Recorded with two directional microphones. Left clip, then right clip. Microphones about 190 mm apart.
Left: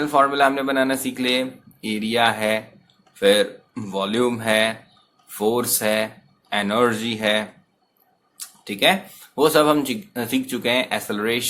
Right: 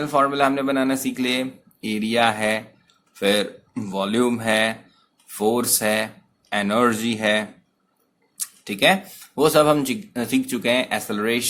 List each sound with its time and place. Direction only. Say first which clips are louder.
0.0 s speech: left 2 dB; 20° right (ahead or behind)